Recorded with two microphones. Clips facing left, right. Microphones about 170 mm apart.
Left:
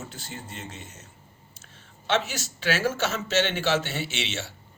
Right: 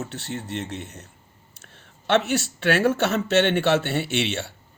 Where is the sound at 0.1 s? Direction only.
70° right (ahead or behind).